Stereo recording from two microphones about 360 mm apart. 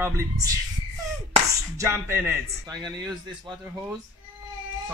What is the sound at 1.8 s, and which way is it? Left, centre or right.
A man's voice, centre.